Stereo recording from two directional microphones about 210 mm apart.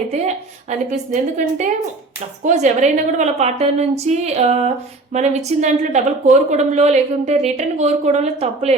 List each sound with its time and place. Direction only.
0.1 s a woman's voice: 35° right (ahead or behind)